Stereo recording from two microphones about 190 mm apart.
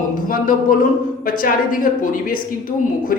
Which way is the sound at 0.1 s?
45° left (ahead or behind).